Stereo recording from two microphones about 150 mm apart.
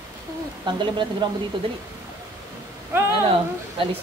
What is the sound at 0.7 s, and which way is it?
Speech, 30° right (ahead or behind).